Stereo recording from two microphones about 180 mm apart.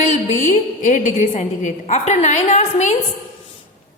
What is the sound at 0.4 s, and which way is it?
A woman's voice, 45° left (ahead or behind).